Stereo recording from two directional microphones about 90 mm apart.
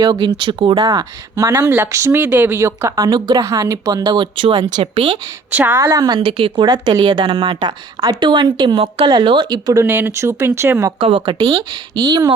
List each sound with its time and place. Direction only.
0.0 s a woman's voice: 50° right (ahead or behind); by 0.9 s 70° right (ahead or behind)
0.9 s speech: 35° right (ahead or behind)
2.2 s speech: 20° right (ahead or behind)
2.6 s speech: 35° right (ahead or behind); by 3.4 s 50° right (ahead or behind)
3.4 s speech: 35° right (ahead or behind); by 5.2 s 70° right (ahead or behind)
5.5 s a woman's voice: 20° right (ahead or behind)
5.7 s speech: 45° right (ahead or behind)
6.1 s speech: 75° right (ahead or behind)
6.7 s a woman's voice: 50° right (ahead or behind); by 9.0 s 80° right
9.2 s speech: 60° right (ahead or behind)
9.8 s speech: 25° right (ahead or behind)
11.0 s speech: 90° right
11.7 s speech: 50° right (ahead or behind)